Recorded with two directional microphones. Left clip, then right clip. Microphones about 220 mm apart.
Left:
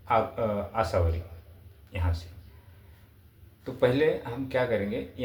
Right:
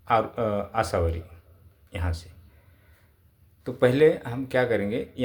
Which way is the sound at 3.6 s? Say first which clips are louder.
Right 5 dB; 50° right (ahead or behind).